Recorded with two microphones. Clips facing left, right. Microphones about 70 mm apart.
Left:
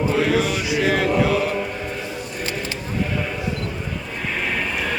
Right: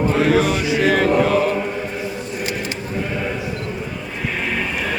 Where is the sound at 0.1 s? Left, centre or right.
Right.